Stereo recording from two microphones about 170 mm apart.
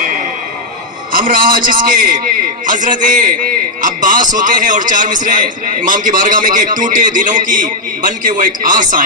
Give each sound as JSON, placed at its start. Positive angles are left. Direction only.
{"t": 1.1, "sound": "a man's voice", "side_deg": -55}